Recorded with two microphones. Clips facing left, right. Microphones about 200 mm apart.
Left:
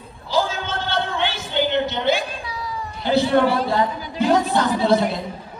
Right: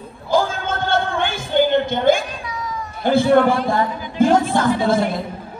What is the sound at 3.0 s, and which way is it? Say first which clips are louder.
Speech: right 3 dB; 50° right (ahead or behind).